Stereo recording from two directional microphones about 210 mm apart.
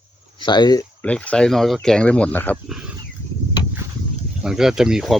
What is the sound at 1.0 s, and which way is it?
Speech, 5° left (ahead or behind).